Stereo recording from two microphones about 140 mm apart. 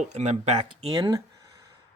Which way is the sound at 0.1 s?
50° right (ahead or behind).